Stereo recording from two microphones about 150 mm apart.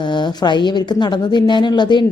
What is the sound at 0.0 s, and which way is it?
A woman's voice, 30° left (ahead or behind).